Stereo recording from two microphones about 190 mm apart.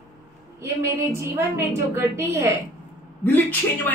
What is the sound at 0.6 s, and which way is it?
A woman's voice, 15° right (ahead or behind).